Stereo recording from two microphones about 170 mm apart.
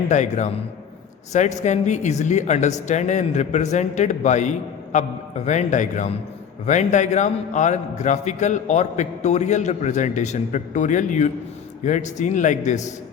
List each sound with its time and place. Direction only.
0.1 s a man's voice: 45° left (ahead or behind)